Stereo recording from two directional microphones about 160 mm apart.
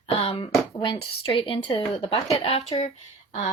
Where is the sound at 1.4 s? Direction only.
35° left (ahead or behind).